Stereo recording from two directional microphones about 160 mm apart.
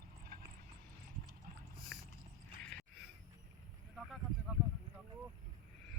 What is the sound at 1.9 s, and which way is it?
Biting, 5° left (ahead or behind).